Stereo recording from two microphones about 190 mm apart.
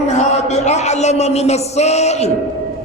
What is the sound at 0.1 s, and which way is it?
Speech, 35° left (ahead or behind).